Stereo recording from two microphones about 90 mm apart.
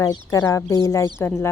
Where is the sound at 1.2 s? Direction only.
30° left (ahead or behind).